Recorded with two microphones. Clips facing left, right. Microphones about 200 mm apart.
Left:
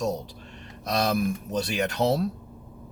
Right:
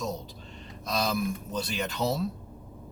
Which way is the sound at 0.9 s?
65° left (ahead or behind).